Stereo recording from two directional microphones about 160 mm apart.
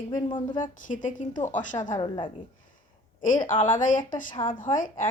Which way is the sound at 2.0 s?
30° left (ahead or behind).